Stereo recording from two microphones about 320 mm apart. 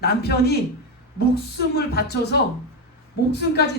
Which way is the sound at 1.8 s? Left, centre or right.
Left.